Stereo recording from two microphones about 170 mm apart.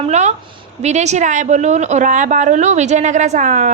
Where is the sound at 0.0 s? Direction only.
40° right (ahead or behind).